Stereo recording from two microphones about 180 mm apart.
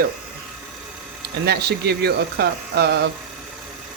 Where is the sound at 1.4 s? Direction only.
65° right (ahead or behind).